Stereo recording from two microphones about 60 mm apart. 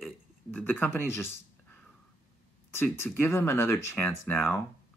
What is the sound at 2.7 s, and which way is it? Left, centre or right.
Speech, left.